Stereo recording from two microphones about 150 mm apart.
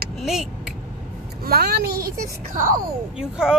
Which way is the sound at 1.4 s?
90° right.